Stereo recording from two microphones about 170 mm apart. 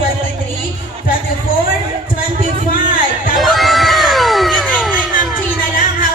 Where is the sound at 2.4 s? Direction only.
45° right (ahead or behind).